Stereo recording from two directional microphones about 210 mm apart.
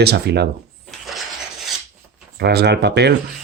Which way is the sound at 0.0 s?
50° right (ahead or behind).